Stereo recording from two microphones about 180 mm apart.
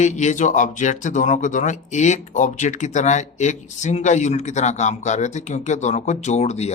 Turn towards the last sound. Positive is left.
turn(degrees=35)  # may be behind; listen again after turning